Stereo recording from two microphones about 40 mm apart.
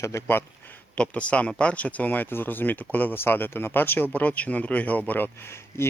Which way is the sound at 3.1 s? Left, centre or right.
Left.